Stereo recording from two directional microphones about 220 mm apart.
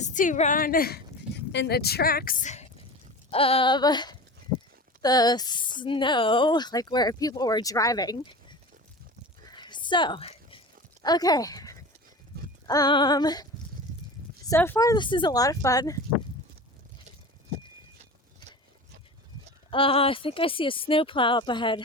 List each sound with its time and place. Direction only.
0.0 s a woman's voice: 35° left (ahead or behind); by 8.5 s 20° left (ahead or behind)
9.5 s a sound: 20° left (ahead or behind)
11.0 s speech: 20° left (ahead or behind)
19.7 s speech: 25° left (ahead or behind)